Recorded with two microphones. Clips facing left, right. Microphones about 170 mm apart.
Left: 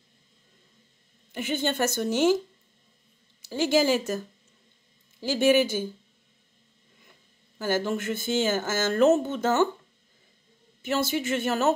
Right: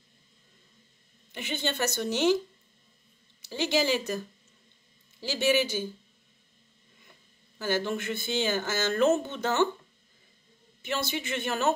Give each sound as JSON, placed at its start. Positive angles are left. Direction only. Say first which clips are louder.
{"t": 1.3, "sound": "speech", "louder": "left 5 dB", "side_deg": 45}
{"t": 3.4, "sound": "speech", "louder": "left 4 dB", "side_deg": 45}
{"t": 5.2, "sound": "speech", "louder": "left 5 dB", "side_deg": 50}
{"t": 7.5, "sound": "speech", "louder": "left 3 dB", "side_deg": 50}
{"t": 10.8, "sound": "speech", "louder": "left 5 dB", "side_deg": 45}